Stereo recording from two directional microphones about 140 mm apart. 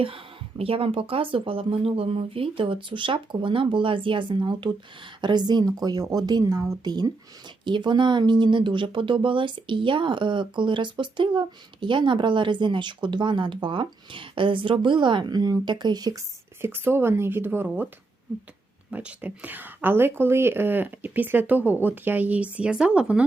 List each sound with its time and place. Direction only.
0.0 s a woman's voice: 40° right (ahead or behind)
16.6 s speech: 15° right (ahead or behind)
18.9 s speech: 10° right (ahead or behind)